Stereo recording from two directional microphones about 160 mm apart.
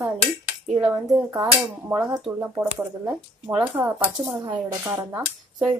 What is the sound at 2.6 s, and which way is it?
Speech, 5° right (ahead or behind).